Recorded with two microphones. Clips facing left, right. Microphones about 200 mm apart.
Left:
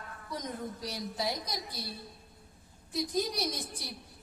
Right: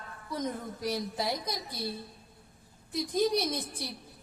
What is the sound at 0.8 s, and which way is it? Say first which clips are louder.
A woman's voice: right 5 dB; 55° right (ahead or behind).